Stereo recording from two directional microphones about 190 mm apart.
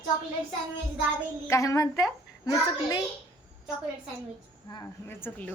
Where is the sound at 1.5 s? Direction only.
15° left (ahead or behind).